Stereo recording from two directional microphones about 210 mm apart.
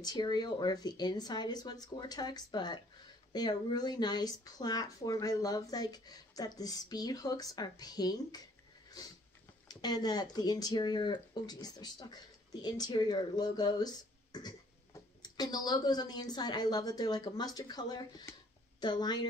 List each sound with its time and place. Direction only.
0.0 s speech: 20° left (ahead or behind)
9.7 s speech: 20° left (ahead or behind)